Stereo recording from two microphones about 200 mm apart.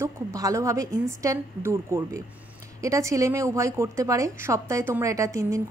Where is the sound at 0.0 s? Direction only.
15° right (ahead or behind).